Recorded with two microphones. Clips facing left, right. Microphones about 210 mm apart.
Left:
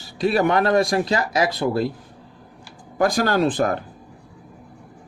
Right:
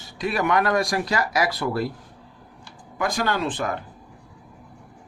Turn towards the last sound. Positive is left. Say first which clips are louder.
# left 6 dB
turn(degrees=40)  # may be behind; listen again after turning